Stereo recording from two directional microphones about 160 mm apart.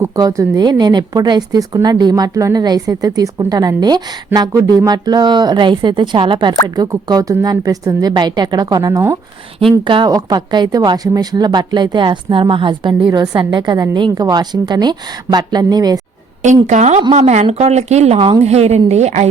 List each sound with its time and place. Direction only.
0.0 s a woman's voice: 20° right (ahead or behind)
9.8 s a woman's voice: 30° right (ahead or behind)
16.6 s a woman's voice: 45° right (ahead or behind)